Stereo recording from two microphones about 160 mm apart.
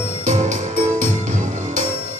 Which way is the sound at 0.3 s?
50° right (ahead or behind).